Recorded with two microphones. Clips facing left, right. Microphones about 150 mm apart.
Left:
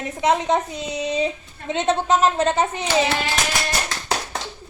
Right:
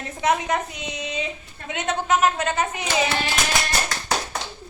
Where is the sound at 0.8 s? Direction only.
40° left (ahead or behind).